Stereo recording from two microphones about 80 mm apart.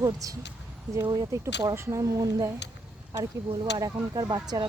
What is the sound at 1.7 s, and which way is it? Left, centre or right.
Speech, right.